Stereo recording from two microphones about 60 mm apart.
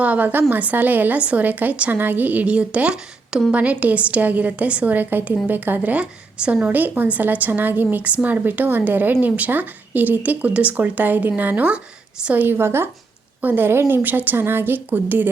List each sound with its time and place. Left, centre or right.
0.0 s a woman's voice: right
12.5 s a woman's voice: right